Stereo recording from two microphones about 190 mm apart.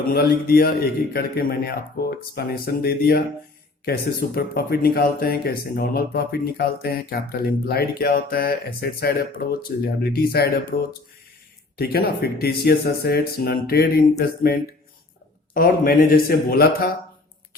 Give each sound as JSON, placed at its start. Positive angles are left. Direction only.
{"t": 0.1, "sound": "speech", "side_deg": 55}